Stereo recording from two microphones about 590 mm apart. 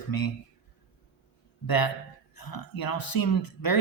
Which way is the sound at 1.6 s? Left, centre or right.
Left.